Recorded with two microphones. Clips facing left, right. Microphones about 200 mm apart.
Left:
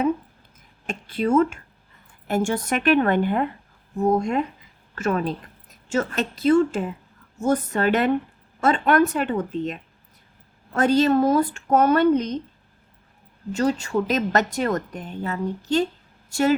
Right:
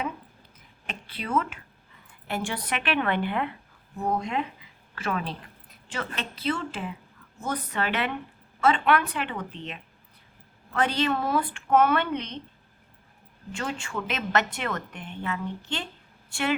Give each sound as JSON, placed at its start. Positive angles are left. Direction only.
{"t": 0.9, "sound": "a woman's voice", "side_deg": 45}
{"t": 10.8, "sound": "a woman's voice", "side_deg": 40}
{"t": 13.5, "sound": "a woman's voice", "side_deg": 40}